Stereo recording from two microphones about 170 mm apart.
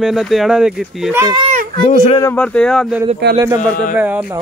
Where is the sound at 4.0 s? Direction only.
10° right (ahead or behind).